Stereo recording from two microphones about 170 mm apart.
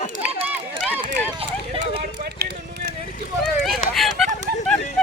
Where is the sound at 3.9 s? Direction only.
Centre (ahead or behind).